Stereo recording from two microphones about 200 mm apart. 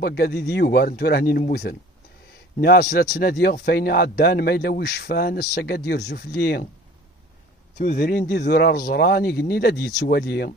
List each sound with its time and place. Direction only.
0.0 s speech: 55° left (ahead or behind)
7.8 s speech: 50° left (ahead or behind)